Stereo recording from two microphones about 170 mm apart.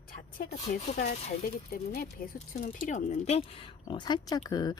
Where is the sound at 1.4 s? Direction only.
65° left (ahead or behind).